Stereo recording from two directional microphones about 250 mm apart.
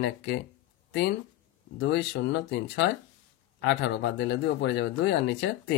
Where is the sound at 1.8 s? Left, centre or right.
Left.